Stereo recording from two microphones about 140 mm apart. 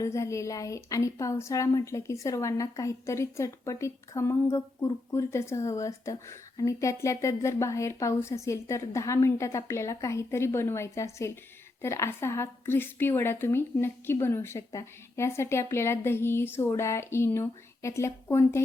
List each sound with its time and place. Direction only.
0.0 s a woman's voice: 20° left (ahead or behind)